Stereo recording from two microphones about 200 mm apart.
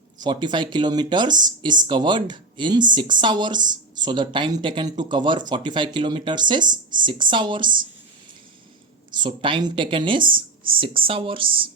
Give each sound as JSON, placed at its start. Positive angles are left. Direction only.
{"t": 0.2, "sound": "speech", "side_deg": -20}
{"t": 9.1, "sound": "speech", "side_deg": -25}